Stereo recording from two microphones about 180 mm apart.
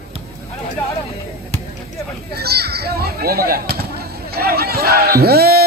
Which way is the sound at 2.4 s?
60° right (ahead or behind).